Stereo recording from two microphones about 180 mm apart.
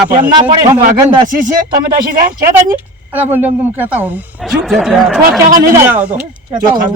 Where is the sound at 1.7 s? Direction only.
55° right (ahead or behind).